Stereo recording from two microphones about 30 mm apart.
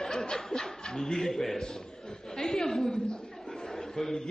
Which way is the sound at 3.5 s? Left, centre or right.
Centre.